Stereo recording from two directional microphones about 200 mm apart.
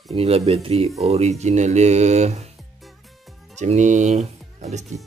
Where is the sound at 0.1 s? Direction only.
30° right (ahead or behind).